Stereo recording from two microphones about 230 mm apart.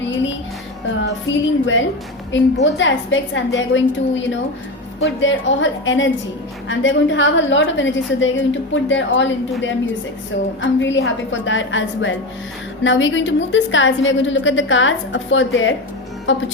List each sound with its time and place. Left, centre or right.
0.0 s music: left
1.0 s a woman's voice: left